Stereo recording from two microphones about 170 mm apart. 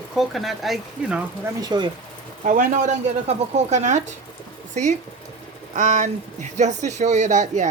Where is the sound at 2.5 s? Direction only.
50° right (ahead or behind).